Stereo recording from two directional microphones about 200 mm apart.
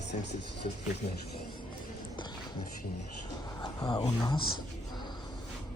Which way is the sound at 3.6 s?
20° left (ahead or behind).